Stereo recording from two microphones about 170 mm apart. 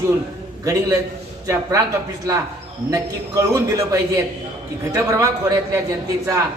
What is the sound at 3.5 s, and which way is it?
A woman's voice, 15° right (ahead or behind).